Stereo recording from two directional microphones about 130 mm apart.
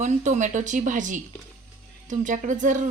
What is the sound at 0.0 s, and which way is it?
Speech, 70° right (ahead or behind).